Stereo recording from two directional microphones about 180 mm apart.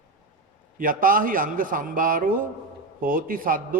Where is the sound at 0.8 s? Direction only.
50° right (ahead or behind).